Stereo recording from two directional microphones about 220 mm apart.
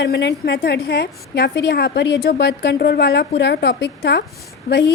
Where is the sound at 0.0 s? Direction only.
50° left (ahead or behind).